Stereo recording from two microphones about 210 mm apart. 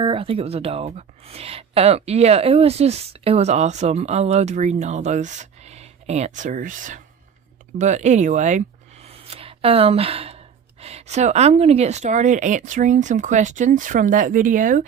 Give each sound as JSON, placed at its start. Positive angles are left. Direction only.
{"t": 0.0, "sound": "speech", "side_deg": -25}